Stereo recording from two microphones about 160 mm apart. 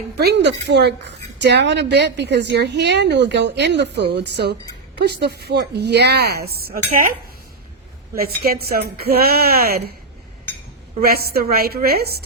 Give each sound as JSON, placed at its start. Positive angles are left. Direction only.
{"t": 0.2, "sound": "a woman's voice", "side_deg": -90}
{"t": 8.1, "sound": "a woman's voice", "side_deg": -75}
{"t": 11.0, "sound": "a woman's voice", "side_deg": -75}